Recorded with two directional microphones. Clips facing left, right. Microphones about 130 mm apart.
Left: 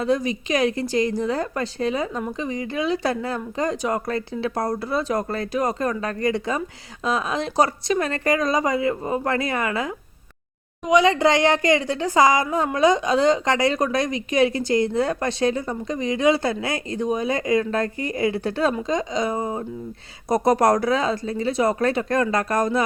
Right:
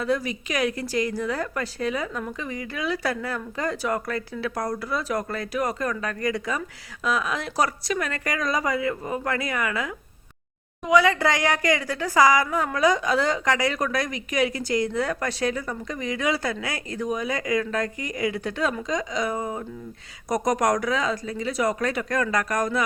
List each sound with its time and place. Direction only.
0.0 s a woman's voice: 25° left (ahead or behind)